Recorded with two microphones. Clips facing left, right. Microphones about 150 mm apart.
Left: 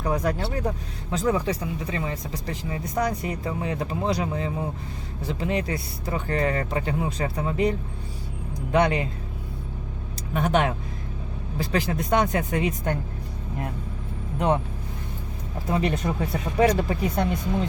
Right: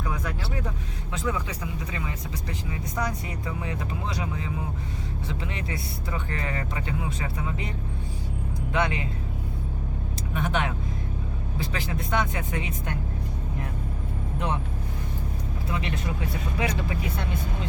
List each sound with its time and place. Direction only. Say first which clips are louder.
0.0 s vehicle: left 7 dB; 40° left (ahead or behind)
0.4 s speech: left 5 dB; 40° left (ahead or behind)
8.7 s speech: left 6 dB; 35° left (ahead or behind)
10.3 s speech: left 6 dB; 40° left (ahead or behind)
14.3 s speech: left 7 dB; 50° left (ahead or behind)
15.7 s speech: left 8 dB; 45° left (ahead or behind)